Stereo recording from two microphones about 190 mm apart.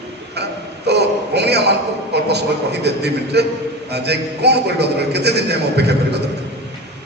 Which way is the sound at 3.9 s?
60° right (ahead or behind).